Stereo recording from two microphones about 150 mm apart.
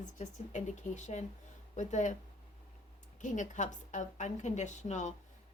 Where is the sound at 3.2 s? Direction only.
55° left (ahead or behind).